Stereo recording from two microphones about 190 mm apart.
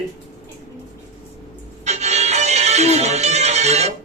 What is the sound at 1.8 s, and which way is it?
Music, 35° right (ahead or behind).